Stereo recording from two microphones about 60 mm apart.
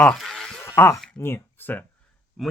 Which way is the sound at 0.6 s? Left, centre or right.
Left.